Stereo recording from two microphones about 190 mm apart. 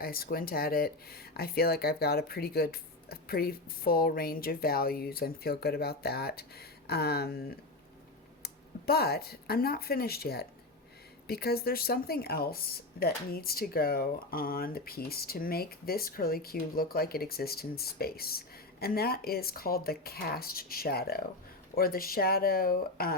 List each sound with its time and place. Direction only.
0.0 s speech: 50° left (ahead or behind)
8.9 s speech: 55° left (ahead or behind)